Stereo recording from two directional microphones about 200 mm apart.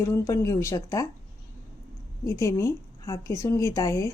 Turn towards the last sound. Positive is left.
turn(degrees=15)  # may be behind; listen again after turning